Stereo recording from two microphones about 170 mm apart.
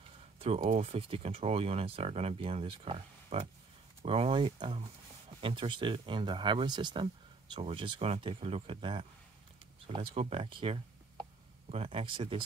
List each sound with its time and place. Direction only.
0.4 s speech: 40° right (ahead or behind)